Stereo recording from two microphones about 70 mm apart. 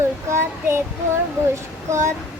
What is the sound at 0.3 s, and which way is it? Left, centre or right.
Speech, right.